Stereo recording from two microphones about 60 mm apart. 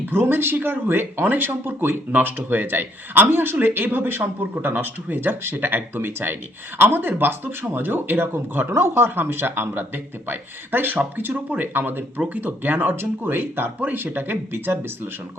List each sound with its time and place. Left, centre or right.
0.0 s speech: right